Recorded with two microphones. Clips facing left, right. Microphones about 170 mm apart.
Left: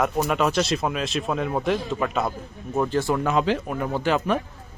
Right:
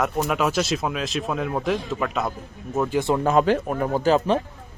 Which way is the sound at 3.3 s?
45° right (ahead or behind).